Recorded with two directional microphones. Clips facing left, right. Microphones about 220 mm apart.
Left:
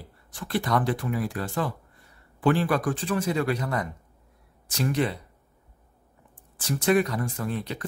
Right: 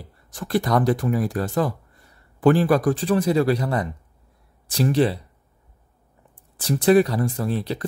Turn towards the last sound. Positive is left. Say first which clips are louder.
# right 5 dB
turn(degrees=-35)  # may be behind; listen again after turning